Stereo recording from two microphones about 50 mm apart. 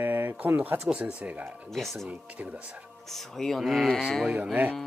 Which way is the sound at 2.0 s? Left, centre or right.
Right.